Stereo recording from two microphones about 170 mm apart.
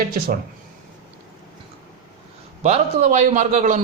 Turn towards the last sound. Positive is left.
turn(degrees=-45)  # may be behind; listen again after turning